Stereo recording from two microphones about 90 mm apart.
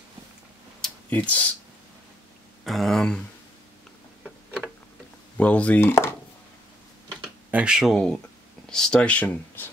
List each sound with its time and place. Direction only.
1.1 s speech: 15° left (ahead or behind)
2.6 s speech: centre (ahead or behind)
5.4 s speech: 15° left (ahead or behind)
5.8 s speech: 25° left (ahead or behind)
7.5 s speech: 10° right (ahead or behind)
7.9 s speech: 10° left (ahead or behind)